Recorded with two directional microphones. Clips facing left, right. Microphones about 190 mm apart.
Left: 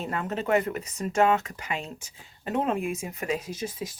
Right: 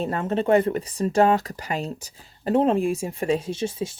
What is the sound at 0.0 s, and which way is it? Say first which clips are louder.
A woman's voice: right 6 dB; 30° right (ahead or behind).